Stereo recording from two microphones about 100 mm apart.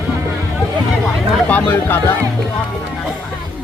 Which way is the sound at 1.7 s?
20° left (ahead or behind).